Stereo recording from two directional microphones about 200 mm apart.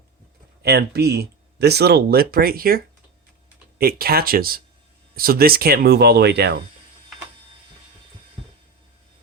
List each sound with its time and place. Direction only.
0.6 s speech: 55° right (ahead or behind)